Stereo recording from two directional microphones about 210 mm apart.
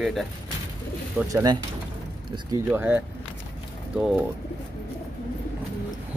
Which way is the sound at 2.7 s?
10° right (ahead or behind).